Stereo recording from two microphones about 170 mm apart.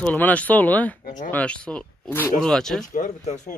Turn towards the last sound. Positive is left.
turn(degrees=50)  # may be behind; listen again after turning